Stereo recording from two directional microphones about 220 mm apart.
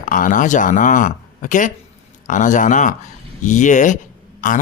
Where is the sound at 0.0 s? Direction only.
40° left (ahead or behind).